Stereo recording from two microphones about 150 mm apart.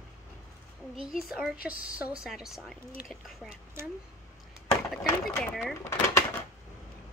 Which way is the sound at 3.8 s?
15° right (ahead or behind).